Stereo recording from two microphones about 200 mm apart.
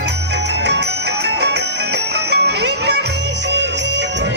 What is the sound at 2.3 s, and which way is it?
Music, 55° right (ahead or behind).